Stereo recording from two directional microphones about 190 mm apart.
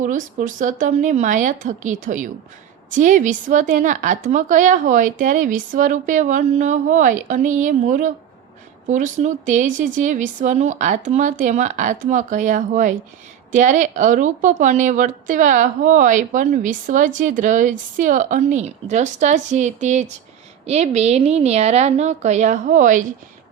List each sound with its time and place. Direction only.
0.0 s a woman's voice: 40° right (ahead or behind)